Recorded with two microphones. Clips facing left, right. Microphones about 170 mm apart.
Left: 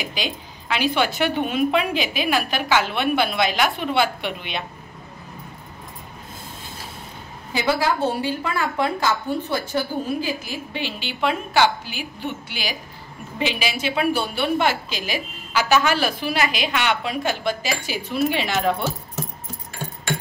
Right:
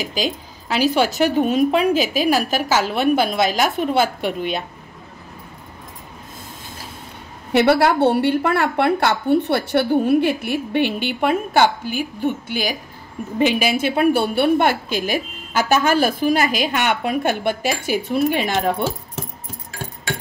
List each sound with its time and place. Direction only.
0.0 s speech: 40° right (ahead or behind)
7.5 s a woman's voice: 70° right (ahead or behind); by 18.5 s 50° right (ahead or behind)